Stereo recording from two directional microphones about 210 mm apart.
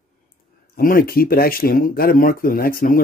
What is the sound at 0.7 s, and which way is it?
Speech, 45° left (ahead or behind).